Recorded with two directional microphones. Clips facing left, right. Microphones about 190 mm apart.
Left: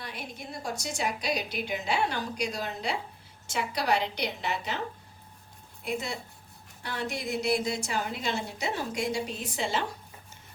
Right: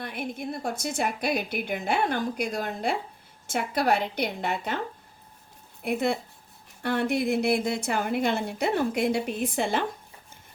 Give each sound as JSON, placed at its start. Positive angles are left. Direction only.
{"t": 0.0, "sound": "a woman's voice", "side_deg": -55}
{"t": 5.8, "sound": "a woman's voice", "side_deg": -60}